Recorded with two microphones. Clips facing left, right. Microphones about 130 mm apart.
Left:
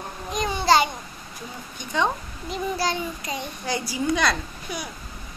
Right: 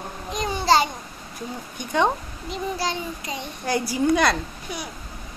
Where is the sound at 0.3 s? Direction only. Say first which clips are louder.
Even; 30° right (ahead or behind).